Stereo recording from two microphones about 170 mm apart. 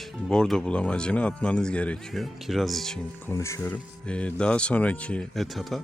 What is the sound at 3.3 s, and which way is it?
Speech, 15° left (ahead or behind).